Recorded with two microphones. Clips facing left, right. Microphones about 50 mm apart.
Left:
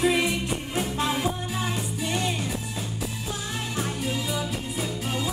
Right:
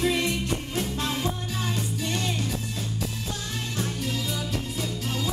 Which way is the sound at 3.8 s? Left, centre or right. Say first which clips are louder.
Left 1 dB; centre.